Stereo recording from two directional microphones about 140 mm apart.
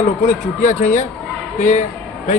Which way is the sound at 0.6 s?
60° left (ahead or behind).